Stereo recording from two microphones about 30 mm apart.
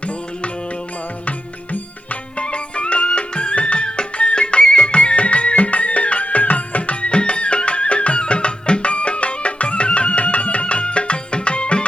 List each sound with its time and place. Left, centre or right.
2.4 s music: left
4.6 s music: left
4.9 s music: left
7.0 s music: left